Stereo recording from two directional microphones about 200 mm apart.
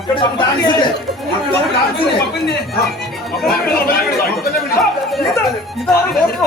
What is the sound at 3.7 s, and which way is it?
Speech, 50° left (ahead or behind).